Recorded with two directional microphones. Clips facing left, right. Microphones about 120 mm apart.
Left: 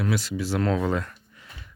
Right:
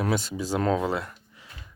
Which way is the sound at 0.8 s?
15° right (ahead or behind).